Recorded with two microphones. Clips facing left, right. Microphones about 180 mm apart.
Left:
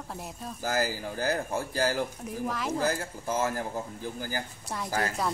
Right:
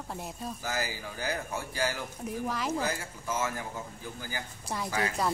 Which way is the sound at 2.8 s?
45° left (ahead or behind).